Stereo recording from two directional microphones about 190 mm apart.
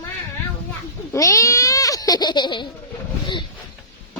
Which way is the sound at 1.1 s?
15° left (ahead or behind).